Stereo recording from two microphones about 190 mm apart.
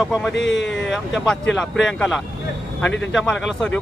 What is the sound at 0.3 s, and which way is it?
Speech, 70° left (ahead or behind).